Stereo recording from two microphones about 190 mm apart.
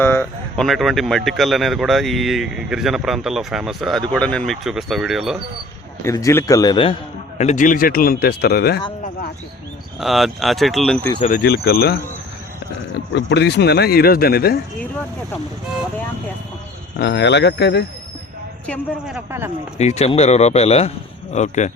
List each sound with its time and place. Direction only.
0.0 s a sound: 10° left (ahead or behind)
0.6 s speech: centre (ahead or behind)
6.0 s a man's voice: 15° left (ahead or behind)
7.3 s speech: 40° left (ahead or behind); by 8.8 s 55° left (ahead or behind)
10.0 s speech: centre (ahead or behind)
11.4 s speech: 55° left (ahead or behind)
13.1 s speech: 65° left (ahead or behind)
17.0 s speech: 65° left (ahead or behind)
18.6 s speech: 5° left (ahead or behind)
19.1 s speech: 10° right (ahead or behind)
19.8 s speech: 35° left (ahead or behind)